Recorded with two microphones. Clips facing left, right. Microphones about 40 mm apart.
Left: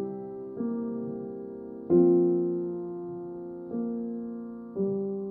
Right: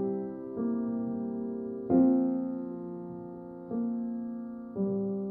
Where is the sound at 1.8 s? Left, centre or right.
Centre.